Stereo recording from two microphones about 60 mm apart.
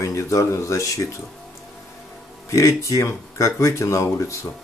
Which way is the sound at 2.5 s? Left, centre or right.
Left.